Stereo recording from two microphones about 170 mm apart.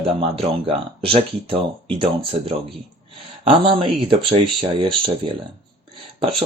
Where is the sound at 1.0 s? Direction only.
35° right (ahead or behind).